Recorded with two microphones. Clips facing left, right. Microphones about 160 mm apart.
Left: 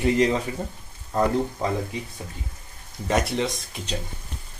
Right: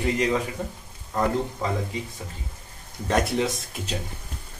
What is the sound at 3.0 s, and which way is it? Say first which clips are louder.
Speech: even; centre (ahead or behind).